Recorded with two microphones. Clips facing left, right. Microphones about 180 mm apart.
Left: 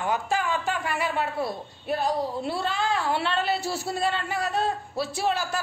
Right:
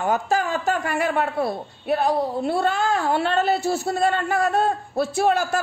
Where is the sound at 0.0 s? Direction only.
45° right (ahead or behind).